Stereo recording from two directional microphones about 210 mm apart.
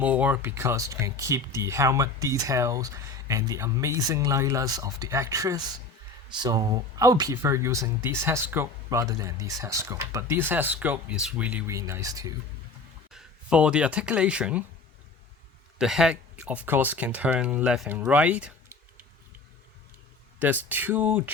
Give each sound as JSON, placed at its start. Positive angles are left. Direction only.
{"t": 0.0, "sound": "speech", "side_deg": -5}
{"t": 13.1, "sound": "speech", "side_deg": -5}
{"t": 15.8, "sound": "speech", "side_deg": -5}
{"t": 20.4, "sound": "speech", "side_deg": -10}